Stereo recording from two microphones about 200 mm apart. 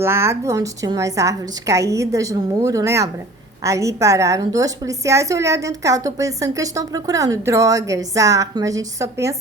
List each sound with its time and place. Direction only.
0.0 s a woman's voice: 10° right (ahead or behind)